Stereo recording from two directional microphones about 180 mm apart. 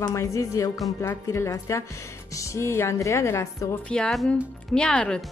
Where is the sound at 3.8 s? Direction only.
5° left (ahead or behind).